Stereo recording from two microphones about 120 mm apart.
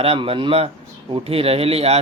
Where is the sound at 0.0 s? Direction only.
55° right (ahead or behind).